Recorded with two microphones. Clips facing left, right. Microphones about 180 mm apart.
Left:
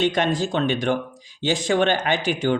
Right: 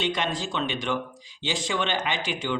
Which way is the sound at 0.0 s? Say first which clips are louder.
Left 7 dB; 45° left (ahead or behind).